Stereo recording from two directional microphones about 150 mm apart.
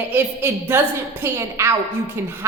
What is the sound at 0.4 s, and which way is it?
A woman's voice, 15° right (ahead or behind).